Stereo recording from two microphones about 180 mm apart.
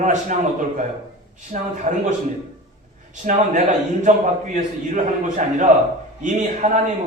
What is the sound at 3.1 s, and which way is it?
A man's voice, 45° right (ahead or behind).